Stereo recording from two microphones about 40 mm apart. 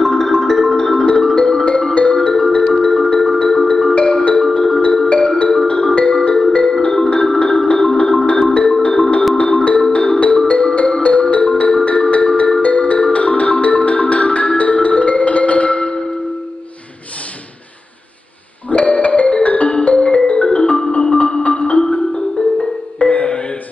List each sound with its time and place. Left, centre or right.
0.0 s music: centre; by 16.1 s left
18.9 s music: left
20.9 s marimba: left
22.9 s music: left